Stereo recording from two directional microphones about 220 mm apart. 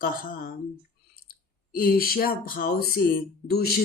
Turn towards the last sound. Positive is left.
turn(degrees=45)  # may be behind; listen again after turning